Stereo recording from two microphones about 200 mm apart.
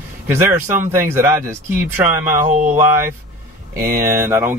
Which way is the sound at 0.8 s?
10° right (ahead or behind).